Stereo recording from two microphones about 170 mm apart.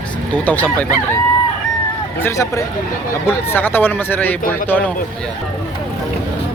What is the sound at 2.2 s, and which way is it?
Speech, 15° left (ahead or behind).